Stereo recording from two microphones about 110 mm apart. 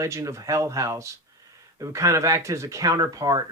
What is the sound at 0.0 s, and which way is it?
Speech, 25° right (ahead or behind).